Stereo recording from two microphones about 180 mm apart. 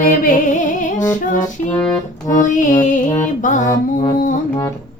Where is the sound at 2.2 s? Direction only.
45° left (ahead or behind).